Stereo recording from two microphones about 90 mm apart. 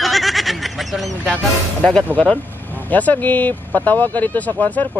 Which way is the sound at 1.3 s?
15° left (ahead or behind).